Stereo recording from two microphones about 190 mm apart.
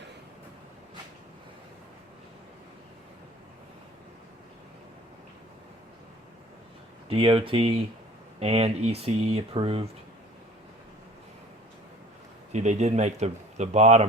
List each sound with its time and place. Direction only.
7.1 s speech: 30° right (ahead or behind)
12.5 s speech: 35° right (ahead or behind)